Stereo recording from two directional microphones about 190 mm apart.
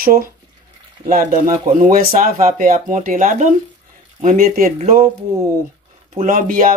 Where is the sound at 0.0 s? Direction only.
50° right (ahead or behind).